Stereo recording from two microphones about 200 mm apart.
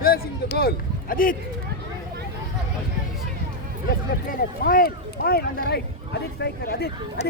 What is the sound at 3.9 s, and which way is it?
Speech, 45° left (ahead or behind).